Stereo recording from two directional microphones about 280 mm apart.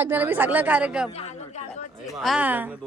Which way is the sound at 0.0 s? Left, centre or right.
Centre.